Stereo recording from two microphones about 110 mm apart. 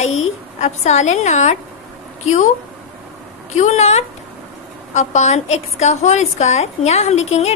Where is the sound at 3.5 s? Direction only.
90° left.